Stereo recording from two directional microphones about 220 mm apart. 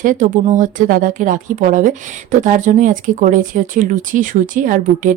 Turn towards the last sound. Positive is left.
turn(degrees=-35)  # may be behind; listen again after turning